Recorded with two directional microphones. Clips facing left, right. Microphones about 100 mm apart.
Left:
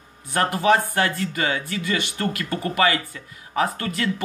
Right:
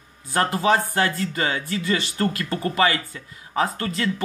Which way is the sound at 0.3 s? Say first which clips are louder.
Left 1 dB; 25° right (ahead or behind).